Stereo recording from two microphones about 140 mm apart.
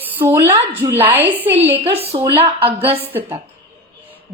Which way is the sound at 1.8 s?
45° right (ahead or behind).